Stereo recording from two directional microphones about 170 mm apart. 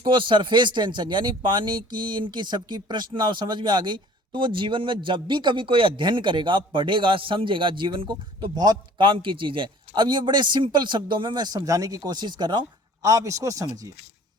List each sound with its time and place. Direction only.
0.0 s speech: 30° right (ahead or behind)